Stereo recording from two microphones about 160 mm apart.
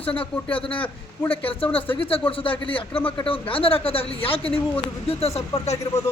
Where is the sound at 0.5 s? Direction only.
35° left (ahead or behind).